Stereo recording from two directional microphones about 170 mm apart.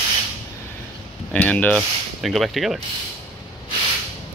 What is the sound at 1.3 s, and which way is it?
Speech, 10° left (ahead or behind).